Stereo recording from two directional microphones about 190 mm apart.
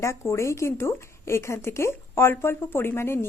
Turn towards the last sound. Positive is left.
turn(degrees=10)  # may be behind; listen again after turning